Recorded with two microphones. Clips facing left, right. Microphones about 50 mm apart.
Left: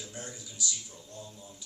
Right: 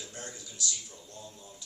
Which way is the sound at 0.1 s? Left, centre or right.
Centre.